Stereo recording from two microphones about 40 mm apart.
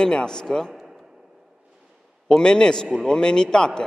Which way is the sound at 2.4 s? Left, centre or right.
Centre.